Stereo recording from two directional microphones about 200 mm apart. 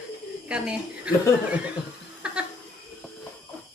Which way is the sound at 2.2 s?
5° right (ahead or behind).